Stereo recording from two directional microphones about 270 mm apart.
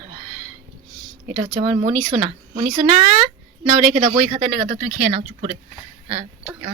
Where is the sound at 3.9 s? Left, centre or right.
Right.